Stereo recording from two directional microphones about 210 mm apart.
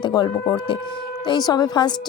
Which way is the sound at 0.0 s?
20° left (ahead or behind).